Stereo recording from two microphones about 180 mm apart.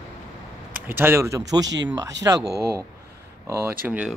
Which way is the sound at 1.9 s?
20° right (ahead or behind).